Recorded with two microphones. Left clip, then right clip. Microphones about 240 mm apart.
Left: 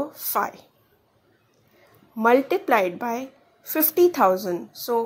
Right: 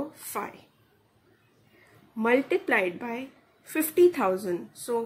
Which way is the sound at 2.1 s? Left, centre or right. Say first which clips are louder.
Left 5 dB; centre.